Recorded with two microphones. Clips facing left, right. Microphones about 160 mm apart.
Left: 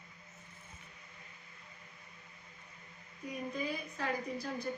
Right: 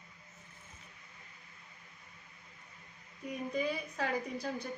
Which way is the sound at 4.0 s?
70° right (ahead or behind).